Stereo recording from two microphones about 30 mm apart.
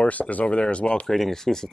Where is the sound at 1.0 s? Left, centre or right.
Centre.